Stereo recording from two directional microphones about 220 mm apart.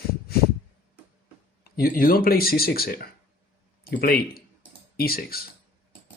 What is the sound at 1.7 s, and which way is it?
Speech, 40° left (ahead or behind).